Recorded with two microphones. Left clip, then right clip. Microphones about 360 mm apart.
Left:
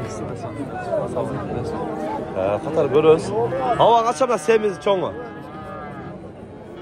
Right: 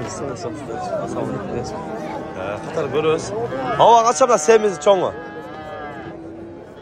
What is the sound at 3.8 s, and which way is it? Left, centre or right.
A man's voice, centre.